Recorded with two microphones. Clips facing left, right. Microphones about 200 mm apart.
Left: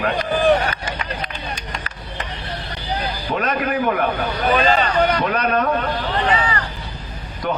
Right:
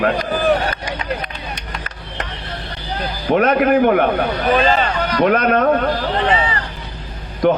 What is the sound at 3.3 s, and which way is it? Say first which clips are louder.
A man's voice: right 9 dB; 55° right (ahead or behind).